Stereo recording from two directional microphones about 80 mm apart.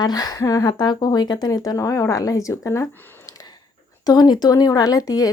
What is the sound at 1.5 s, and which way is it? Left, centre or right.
Speech, left.